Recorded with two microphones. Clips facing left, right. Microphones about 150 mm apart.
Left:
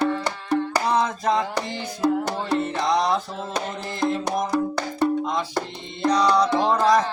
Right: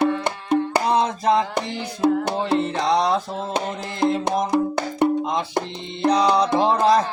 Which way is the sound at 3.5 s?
25° right (ahead or behind).